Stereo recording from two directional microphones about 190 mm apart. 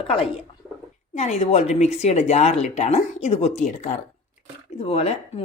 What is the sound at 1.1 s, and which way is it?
A woman's voice, 35° left (ahead or behind).